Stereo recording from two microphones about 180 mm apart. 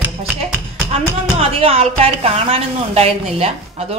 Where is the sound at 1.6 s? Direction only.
35° right (ahead or behind).